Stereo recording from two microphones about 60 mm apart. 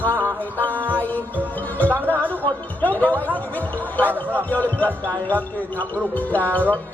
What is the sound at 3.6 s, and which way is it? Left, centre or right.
Speech, left.